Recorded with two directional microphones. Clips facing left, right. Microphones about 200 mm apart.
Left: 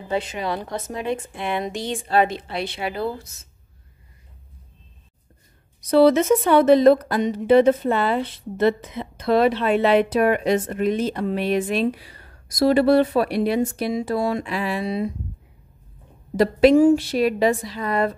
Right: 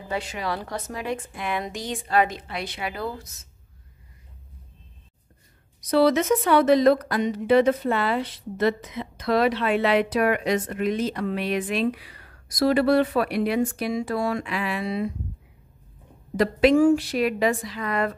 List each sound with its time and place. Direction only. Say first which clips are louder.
0.1 s a woman's voice: left 4 dB; 20° left (ahead or behind)
5.8 s a woman's voice: left 4 dB; 25° left (ahead or behind)
16.7 s a woman's voice: left 3 dB; 25° left (ahead or behind)